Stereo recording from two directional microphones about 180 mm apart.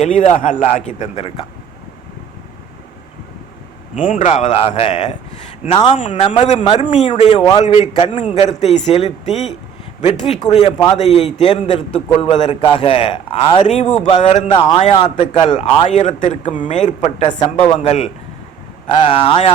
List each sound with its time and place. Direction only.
0.0 s a man's voice: 40° left (ahead or behind)
3.9 s a man's voice: 45° left (ahead or behind); by 6.0 s 30° left (ahead or behind)
6.0 s a man's voice: 45° left (ahead or behind)
10.5 s a man's voice: 30° left (ahead or behind)
11.9 s a man's voice: 5° left (ahead or behind)
12.2 s a man's voice: 30° left (ahead or behind)
14.5 s a man's voice: 30° left (ahead or behind)